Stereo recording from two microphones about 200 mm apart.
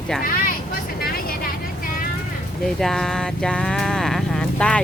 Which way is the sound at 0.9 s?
50° left (ahead or behind).